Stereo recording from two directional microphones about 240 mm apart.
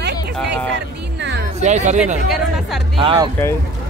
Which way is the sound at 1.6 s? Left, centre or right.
Right.